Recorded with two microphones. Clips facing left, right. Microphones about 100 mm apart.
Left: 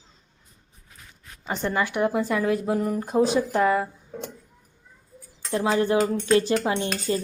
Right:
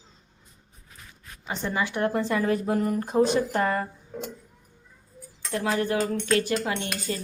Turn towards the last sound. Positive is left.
turn(degrees=25)  # may be behind; listen again after turning